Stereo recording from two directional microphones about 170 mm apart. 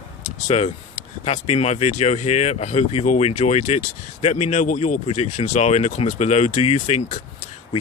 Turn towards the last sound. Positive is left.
turn(degrees=40)  # may be behind; listen again after turning